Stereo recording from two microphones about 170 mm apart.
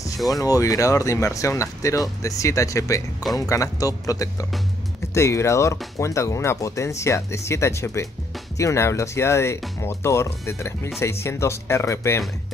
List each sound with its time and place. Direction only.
0.3 s speech: 20° left (ahead or behind)